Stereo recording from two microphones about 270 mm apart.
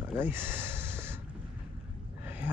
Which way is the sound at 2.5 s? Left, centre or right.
Centre.